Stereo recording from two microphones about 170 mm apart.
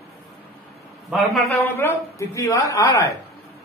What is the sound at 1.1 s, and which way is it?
Speech, centre (ahead or behind).